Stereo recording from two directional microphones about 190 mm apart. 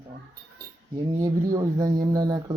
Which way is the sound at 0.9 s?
25° right (ahead or behind).